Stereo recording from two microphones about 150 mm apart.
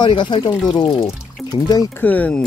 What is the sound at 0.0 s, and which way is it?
Speech, 30° left (ahead or behind).